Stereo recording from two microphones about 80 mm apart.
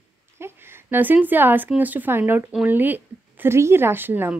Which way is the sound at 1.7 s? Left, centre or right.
Right.